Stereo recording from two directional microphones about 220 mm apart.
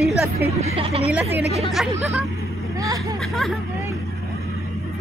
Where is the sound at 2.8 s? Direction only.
15° right (ahead or behind).